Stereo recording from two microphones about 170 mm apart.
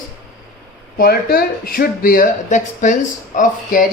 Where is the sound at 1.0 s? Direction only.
60° left (ahead or behind).